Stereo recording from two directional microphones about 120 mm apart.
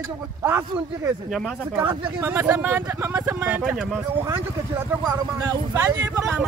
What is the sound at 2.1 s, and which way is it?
Speech, 20° right (ahead or behind).